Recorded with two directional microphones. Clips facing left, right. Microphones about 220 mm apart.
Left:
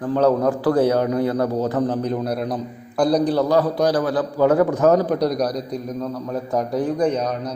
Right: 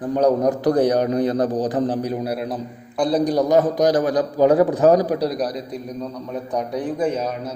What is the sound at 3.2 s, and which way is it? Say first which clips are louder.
A man's voice: right 1 dB; 15° right (ahead or behind).